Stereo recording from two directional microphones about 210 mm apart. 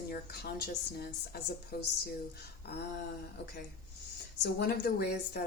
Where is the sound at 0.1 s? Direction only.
50° left (ahead or behind).